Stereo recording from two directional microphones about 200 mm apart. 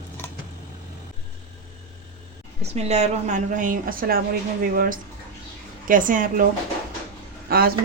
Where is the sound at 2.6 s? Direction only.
30° right (ahead or behind).